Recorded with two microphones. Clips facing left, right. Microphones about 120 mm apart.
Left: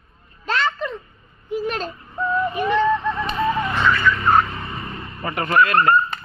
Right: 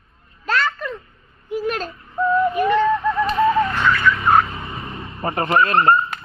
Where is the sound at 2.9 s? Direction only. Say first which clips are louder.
Right 1 dB; 10° right (ahead or behind).